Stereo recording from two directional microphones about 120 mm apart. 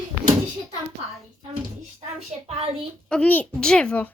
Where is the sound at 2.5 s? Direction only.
55° right (ahead or behind).